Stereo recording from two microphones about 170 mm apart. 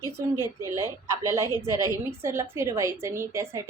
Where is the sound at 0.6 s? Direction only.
15° right (ahead or behind).